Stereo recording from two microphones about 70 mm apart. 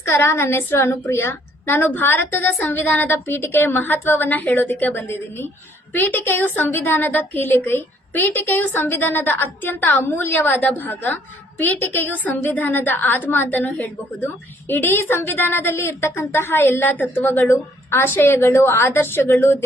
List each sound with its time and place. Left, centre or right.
0.0 s a woman's voice: left